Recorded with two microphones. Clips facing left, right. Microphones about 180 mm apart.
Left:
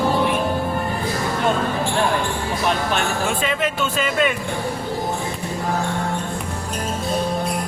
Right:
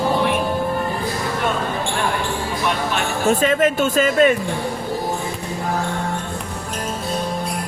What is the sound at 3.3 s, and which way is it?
Speech, 45° right (ahead or behind).